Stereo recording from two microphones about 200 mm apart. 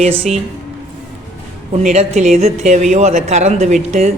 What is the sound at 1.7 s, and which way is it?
A man's voice, 35° right (ahead or behind).